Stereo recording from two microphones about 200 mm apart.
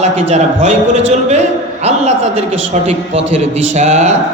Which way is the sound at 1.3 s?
35° right (ahead or behind).